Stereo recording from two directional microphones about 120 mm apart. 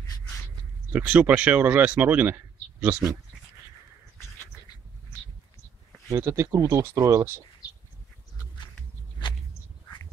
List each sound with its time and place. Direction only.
0.9 s speech: 10° right (ahead or behind)
6.1 s speech: 25° right (ahead or behind)